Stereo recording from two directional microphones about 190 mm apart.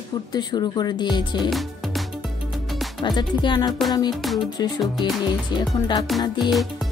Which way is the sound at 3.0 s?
25° left (ahead or behind).